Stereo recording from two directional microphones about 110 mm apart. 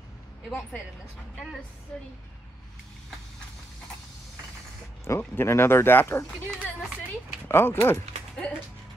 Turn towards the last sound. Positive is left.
turn(degrees=20)  # may be behind; listen again after turning